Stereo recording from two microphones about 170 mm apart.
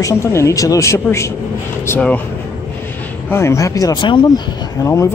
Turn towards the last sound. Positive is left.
turn(degrees=20)  # may be behind; listen again after turning